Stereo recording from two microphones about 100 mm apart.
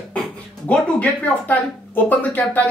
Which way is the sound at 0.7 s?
15° left (ahead or behind).